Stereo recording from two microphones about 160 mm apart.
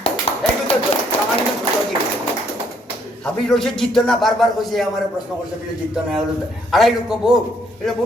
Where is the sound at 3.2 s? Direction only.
5° left (ahead or behind).